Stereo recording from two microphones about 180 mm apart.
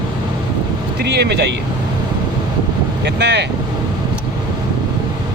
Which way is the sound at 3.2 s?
70° right (ahead or behind).